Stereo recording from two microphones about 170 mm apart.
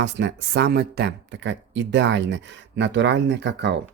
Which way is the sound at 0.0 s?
90° right.